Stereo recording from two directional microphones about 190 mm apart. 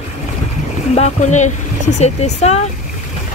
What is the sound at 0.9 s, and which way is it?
Speech, 35° left (ahead or behind).